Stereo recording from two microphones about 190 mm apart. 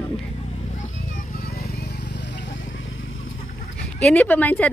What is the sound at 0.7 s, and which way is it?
Vehicle, 40° left (ahead or behind).